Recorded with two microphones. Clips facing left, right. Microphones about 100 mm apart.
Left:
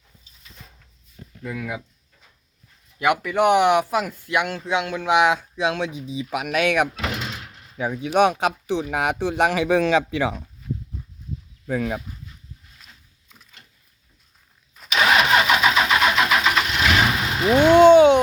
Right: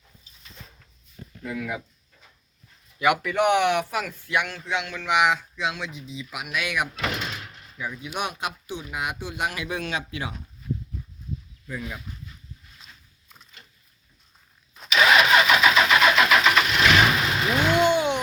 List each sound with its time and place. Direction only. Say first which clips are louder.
3.0 s speech: left 2 dB; 5° left (ahead or behind); by 4.4 s 20° left (ahead or behind)
4.4 s speech: left 4 dB; 35° left (ahead or behind)
6.2 s speech: left 9 dB; 65° left (ahead or behind)
7.0 s door: left 1 dB; 5° left (ahead or behind)
7.8 s speech: left 12 dB; 70° left (ahead or behind); by 9.7 s 90° left
11.6 s speech: left 11 dB; 55° left (ahead or behind)
14.9 s vehicle: even; 35° left (ahead or behind); by 17.4 s 10° left (ahead or behind)
17.4 s a sound: left 10 dB; 25° left (ahead or behind)
17.9 s a sound: left 12 dB; 75° left (ahead or behind)